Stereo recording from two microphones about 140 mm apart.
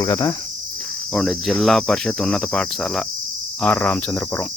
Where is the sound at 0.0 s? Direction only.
25° left (ahead or behind).